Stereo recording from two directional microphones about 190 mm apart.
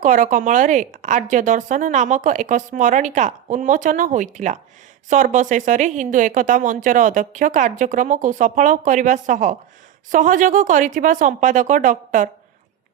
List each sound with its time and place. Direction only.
0.0 s speech: 40° right (ahead or behind)